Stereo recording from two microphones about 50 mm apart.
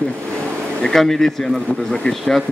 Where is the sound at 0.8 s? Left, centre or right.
Centre.